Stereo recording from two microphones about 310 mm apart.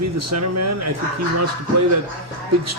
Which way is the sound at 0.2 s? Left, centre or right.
Right.